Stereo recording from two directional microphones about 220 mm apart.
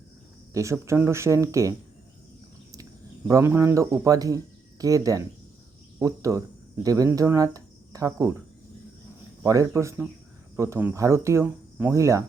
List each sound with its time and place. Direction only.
0.5 s speech: 15° right (ahead or behind)
3.2 s speech: 15° right (ahead or behind)
9.4 s speech: 15° right (ahead or behind)